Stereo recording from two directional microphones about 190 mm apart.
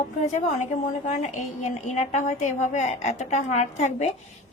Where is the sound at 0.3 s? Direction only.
40° left (ahead or behind).